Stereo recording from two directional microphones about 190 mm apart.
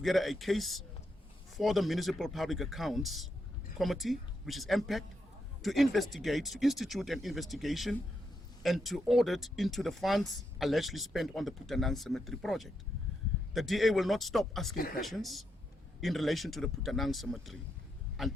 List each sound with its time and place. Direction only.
0.0 s speech: centre (ahead or behind)
14.8 s speech: 50° left (ahead or behind)
15.0 s speech: centre (ahead or behind)